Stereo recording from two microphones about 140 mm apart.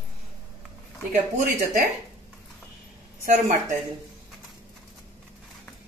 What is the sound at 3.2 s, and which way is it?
Speech, 70° right (ahead or behind).